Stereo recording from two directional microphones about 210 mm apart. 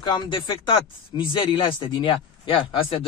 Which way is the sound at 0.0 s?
20° left (ahead or behind).